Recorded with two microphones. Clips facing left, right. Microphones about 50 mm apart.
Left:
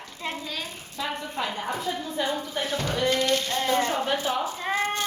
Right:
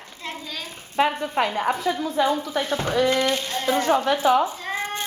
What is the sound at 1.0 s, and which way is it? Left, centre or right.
Speech, right.